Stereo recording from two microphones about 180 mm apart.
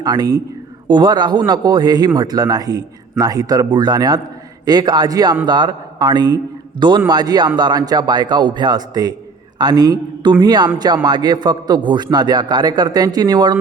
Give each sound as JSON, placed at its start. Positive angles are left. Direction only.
{"t": 0.0, "sound": "a man's voice", "side_deg": -20}